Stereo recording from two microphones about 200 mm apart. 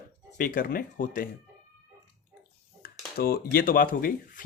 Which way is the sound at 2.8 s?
50° left (ahead or behind).